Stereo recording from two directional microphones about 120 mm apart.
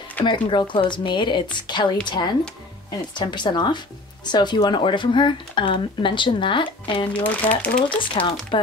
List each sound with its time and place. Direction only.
0.2 s speech: 40° left (ahead or behind)
7.2 s speech: 10° left (ahead or behind)
7.9 s speech: 45° left (ahead or behind)